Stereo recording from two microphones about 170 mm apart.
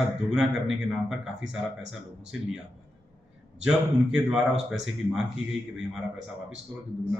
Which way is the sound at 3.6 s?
5° right (ahead or behind).